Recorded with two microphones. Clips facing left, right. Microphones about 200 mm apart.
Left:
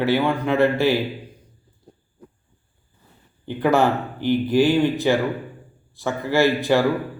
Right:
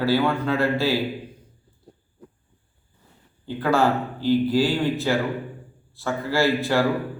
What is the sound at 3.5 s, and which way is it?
A man's voice, 20° left (ahead or behind).